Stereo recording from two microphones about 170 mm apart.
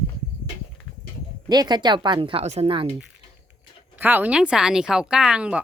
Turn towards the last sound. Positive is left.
turn(degrees=-5)  # may be behind; listen again after turning